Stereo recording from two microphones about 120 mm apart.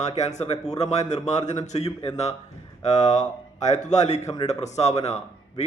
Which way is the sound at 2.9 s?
75° left (ahead or behind).